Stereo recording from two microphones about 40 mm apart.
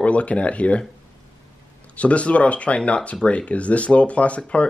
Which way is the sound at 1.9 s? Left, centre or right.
Left.